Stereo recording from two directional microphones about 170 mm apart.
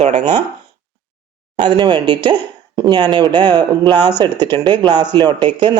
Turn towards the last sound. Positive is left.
turn(degrees=-25)  # may be behind; listen again after turning